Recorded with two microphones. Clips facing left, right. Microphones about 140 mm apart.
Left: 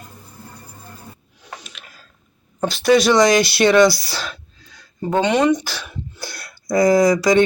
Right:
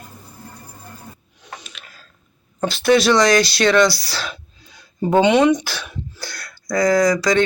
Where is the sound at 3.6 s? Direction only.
20° left (ahead or behind).